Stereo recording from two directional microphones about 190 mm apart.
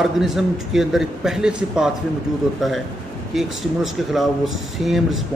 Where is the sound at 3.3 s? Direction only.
Centre (ahead or behind).